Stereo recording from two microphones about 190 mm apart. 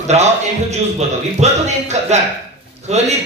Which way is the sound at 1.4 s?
35° right (ahead or behind).